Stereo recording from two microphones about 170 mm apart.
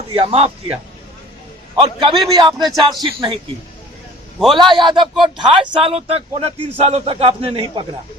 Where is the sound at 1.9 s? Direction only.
25° right (ahead or behind).